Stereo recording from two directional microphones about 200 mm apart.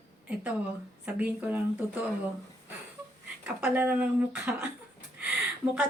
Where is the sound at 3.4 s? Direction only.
5° right (ahead or behind).